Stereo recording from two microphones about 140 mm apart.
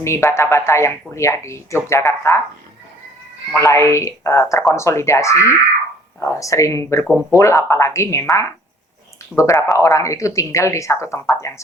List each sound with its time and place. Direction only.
0.0 s speech: 20° left (ahead or behind)
3.5 s speech: 20° left (ahead or behind)